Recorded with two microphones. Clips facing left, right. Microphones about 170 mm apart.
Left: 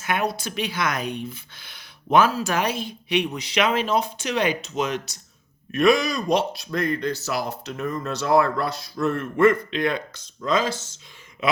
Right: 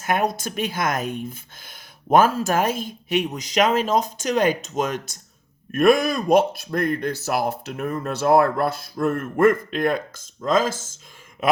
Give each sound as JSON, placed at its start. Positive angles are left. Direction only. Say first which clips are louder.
{"t": 0.0, "sound": "speech", "louder": "right 3 dB", "side_deg": -45}